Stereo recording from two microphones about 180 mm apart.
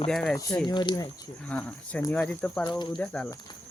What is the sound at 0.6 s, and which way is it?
Speech, 25° left (ahead or behind).